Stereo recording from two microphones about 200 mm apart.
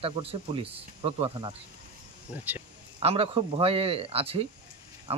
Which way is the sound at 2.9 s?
30° right (ahead or behind).